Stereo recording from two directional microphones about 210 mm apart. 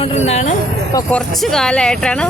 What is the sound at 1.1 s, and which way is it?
Speech, 5° left (ahead or behind).